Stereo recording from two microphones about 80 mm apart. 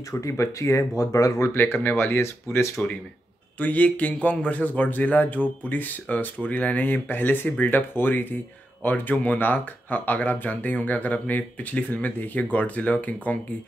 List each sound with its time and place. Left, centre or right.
0.1 s speech: left
3.5 s speech: centre